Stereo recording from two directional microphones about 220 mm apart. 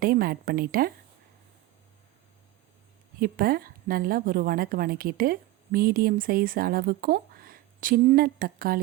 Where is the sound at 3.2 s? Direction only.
40° right (ahead or behind).